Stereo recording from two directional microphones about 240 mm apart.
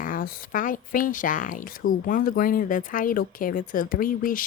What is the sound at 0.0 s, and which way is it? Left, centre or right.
Speech, left.